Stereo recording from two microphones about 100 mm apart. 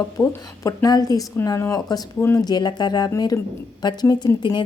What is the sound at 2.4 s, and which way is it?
A woman's voice, 45° left (ahead or behind).